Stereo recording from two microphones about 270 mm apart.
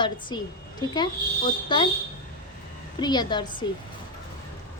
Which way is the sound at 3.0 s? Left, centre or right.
Centre.